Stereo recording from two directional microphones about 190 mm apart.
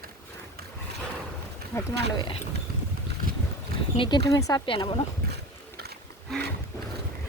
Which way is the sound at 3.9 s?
25° left (ahead or behind).